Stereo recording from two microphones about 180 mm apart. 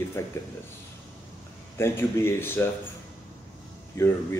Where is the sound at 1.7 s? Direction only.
15° left (ahead or behind).